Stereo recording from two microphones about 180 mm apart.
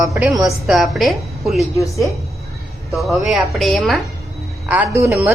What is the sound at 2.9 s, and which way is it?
Speech, centre (ahead or behind).